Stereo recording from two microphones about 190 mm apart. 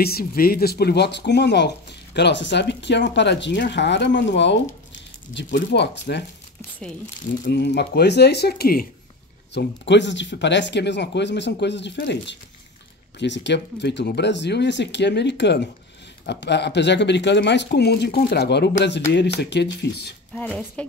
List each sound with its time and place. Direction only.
0.0 s speech: 55° left (ahead or behind)
7.4 s speech: 65° left (ahead or behind)
9.5 s speech: 65° left (ahead or behind)